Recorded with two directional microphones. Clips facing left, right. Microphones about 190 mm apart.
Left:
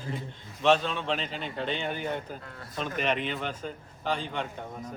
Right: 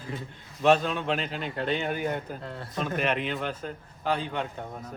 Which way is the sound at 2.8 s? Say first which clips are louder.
Right 1 dB; 5° right (ahead or behind).